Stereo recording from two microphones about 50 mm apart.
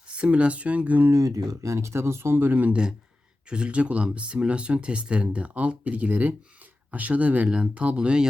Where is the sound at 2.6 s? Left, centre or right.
Centre.